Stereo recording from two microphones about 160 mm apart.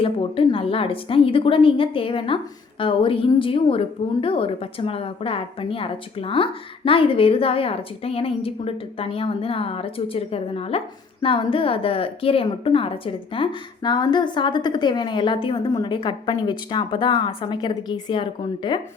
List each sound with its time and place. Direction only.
0.0 s a woman's voice: 35° left (ahead or behind)